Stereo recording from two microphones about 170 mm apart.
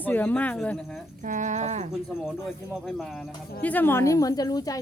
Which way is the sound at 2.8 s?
Centre (ahead or behind).